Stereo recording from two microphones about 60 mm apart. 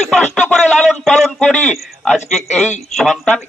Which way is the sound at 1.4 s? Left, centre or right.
Left.